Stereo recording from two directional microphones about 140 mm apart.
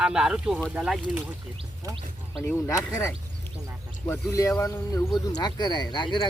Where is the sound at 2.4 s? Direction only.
20° left (ahead or behind).